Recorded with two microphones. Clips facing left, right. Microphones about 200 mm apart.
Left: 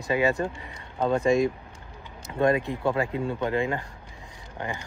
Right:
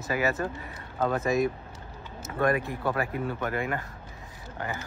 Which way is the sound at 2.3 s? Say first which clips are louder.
Left 3 dB; 25° left (ahead or behind).